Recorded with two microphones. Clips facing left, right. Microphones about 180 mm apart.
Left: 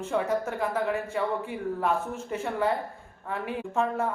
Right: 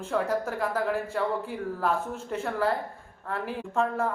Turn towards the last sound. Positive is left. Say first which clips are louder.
# even
turn(degrees=5)  # may be behind; listen again after turning